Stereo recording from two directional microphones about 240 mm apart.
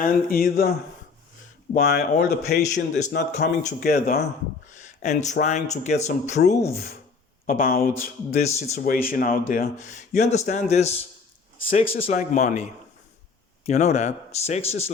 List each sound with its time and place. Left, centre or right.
0.0 s speech: left
13.7 s speech: left